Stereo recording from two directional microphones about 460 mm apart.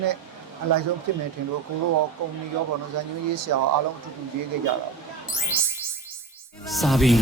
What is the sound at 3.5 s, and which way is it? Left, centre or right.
Speech, right.